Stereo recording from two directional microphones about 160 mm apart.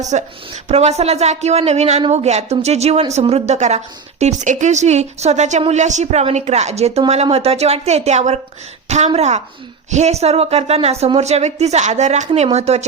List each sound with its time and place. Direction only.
0.0 s a woman's voice: 45° right (ahead or behind)